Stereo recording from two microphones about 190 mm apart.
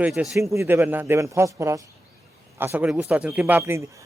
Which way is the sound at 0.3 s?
15° right (ahead or behind).